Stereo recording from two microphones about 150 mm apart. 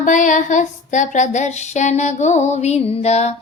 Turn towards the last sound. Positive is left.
turn(degrees=45)  # may be behind; listen again after turning